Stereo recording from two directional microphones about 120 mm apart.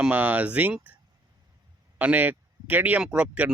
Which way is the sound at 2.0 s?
15° right (ahead or behind).